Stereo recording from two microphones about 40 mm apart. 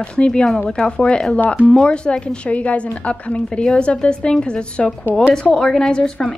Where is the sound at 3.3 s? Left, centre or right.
Left.